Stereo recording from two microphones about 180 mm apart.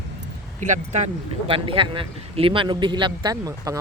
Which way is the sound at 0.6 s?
45° right (ahead or behind).